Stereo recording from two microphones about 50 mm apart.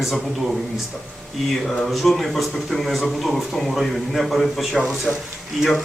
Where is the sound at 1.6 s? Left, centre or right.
Centre.